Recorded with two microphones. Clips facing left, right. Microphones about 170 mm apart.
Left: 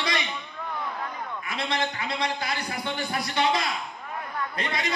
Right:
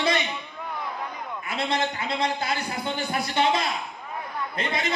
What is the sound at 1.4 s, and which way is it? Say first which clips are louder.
A man's voice: right 3 dB; 25° right (ahead or behind).